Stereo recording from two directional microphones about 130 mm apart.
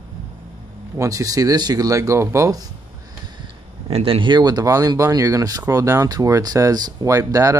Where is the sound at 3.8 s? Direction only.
45° right (ahead or behind).